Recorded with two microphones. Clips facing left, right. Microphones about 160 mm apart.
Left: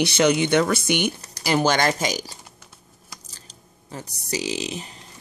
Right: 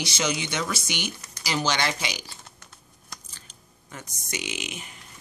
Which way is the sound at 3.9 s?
35° left (ahead or behind).